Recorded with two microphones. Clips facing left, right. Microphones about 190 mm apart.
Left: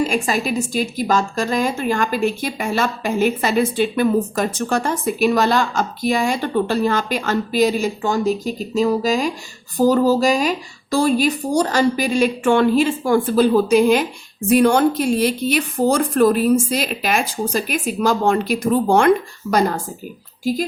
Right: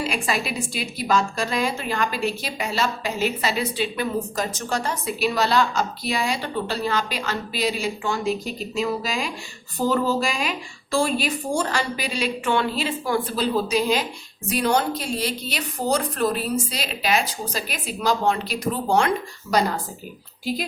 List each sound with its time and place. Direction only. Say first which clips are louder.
0.0 s a woman's voice: left 6 dB; 45° left (ahead or behind)